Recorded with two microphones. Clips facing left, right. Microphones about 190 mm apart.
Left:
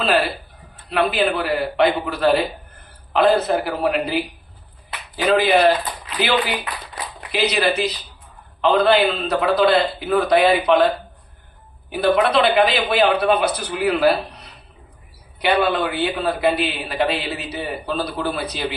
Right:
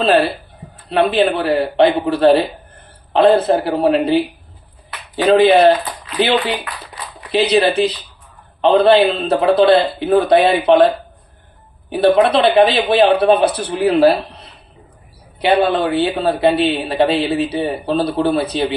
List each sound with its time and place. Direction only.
0.0 s a man's voice: 30° right (ahead or behind)
11.9 s a man's voice: 30° right (ahead or behind)